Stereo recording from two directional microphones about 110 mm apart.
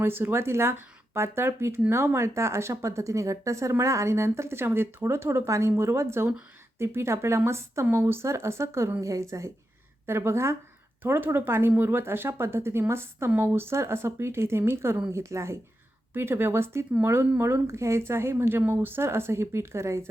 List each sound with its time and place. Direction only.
0.0 s speech: 20° right (ahead or behind)